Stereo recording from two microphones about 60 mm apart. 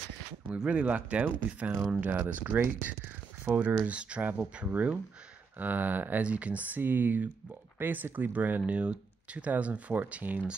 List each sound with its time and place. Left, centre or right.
0.5 s speech: centre